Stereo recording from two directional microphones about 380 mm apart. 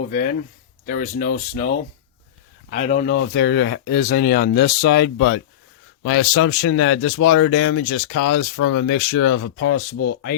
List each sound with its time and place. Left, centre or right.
0.1 s speech: left